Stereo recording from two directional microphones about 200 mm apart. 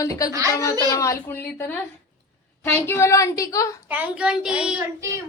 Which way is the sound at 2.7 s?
10° left (ahead or behind).